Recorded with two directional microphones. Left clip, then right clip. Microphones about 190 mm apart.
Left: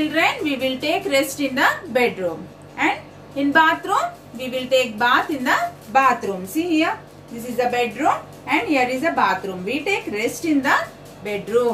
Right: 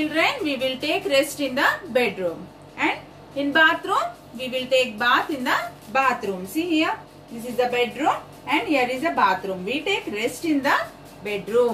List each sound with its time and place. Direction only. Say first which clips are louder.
0.1 s a woman's voice: left 2 dB; 10° left (ahead or behind)